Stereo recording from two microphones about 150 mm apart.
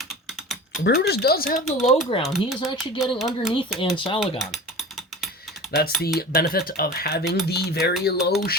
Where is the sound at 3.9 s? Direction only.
35° left (ahead or behind).